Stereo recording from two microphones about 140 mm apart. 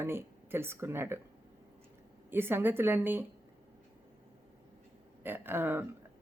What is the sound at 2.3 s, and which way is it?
Speech, 15° right (ahead or behind).